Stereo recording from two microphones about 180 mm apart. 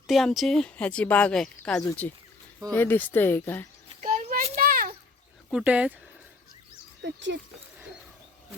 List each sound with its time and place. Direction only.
0.1 s speech: centre (ahead or behind)
4.0 s a sound: 50° right (ahead or behind)
5.5 s speech: 5° right (ahead or behind)
7.0 s speech: 85° right